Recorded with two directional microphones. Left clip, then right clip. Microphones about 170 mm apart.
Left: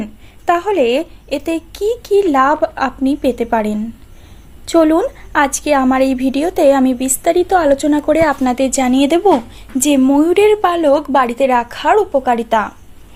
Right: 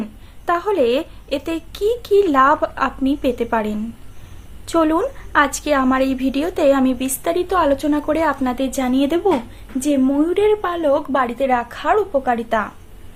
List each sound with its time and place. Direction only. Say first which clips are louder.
0.4 s a woman's voice: left 4 dB; 15° left (ahead or behind)